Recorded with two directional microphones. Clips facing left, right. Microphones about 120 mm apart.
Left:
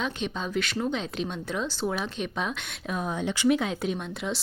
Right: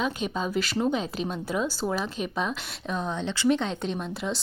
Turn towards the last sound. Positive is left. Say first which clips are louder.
# even
turn(degrees=0)  # may be behind; listen again after turning